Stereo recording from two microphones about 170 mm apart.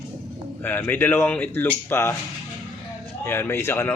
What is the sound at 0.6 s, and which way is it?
Speech, 10° left (ahead or behind).